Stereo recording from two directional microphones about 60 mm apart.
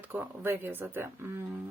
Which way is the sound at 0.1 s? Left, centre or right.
Right.